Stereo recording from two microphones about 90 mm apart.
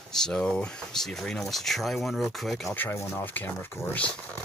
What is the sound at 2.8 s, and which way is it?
Speech, 30° left (ahead or behind).